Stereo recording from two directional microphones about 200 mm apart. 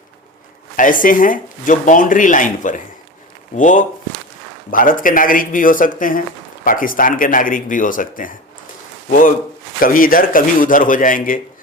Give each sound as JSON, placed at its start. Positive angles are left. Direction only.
{"t": 0.8, "sound": "speech", "side_deg": 45}
{"t": 9.8, "sound": "speech", "side_deg": 45}